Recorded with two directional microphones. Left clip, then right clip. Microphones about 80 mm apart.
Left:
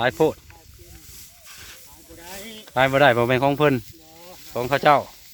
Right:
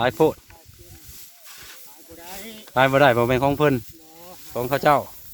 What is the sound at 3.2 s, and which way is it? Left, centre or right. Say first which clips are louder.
Speech: left 1 dB; centre.